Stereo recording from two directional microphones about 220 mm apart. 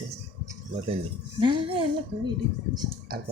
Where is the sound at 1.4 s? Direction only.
20° right (ahead or behind).